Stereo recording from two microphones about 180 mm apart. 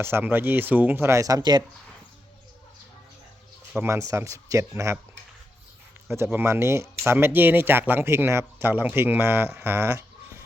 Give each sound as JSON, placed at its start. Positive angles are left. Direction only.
{"t": 0.0, "sound": "speech", "side_deg": -10}
{"t": 3.7, "sound": "speech", "side_deg": -15}
{"t": 6.1, "sound": "speech", "side_deg": -15}